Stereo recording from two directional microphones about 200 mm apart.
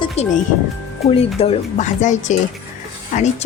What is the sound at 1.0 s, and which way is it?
A woman's voice, 30° left (ahead or behind).